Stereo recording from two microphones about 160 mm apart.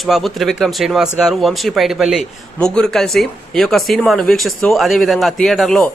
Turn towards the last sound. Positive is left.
turn(degrees=5)  # may be behind; listen again after turning